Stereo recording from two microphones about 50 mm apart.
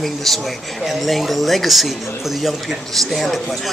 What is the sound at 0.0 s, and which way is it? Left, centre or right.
Speech, centre.